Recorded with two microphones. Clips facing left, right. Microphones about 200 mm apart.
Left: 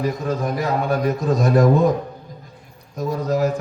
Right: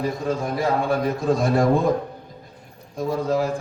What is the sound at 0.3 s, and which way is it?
A man's voice, 30° right (ahead or behind).